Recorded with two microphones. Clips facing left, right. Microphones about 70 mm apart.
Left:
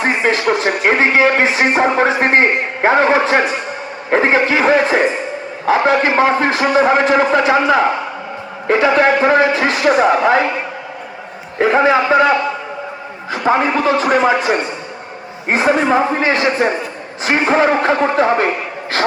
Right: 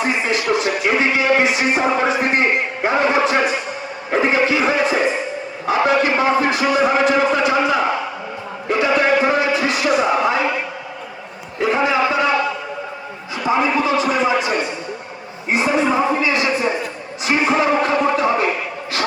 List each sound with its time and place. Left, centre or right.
0.0 s a man's voice: left
5.6 s a man's voice: left
11.5 s speech: left
13.3 s a man's voice: left